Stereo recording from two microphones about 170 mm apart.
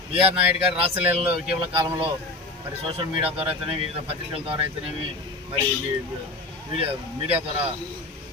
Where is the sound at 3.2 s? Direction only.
35° right (ahead or behind).